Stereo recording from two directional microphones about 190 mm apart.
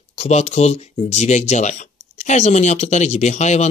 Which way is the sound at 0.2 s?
35° left (ahead or behind).